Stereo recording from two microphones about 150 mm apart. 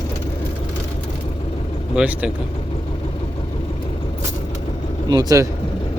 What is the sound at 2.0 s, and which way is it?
Speech, 10° right (ahead or behind).